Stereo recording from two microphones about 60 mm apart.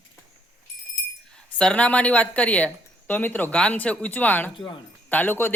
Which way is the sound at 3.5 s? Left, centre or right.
Centre.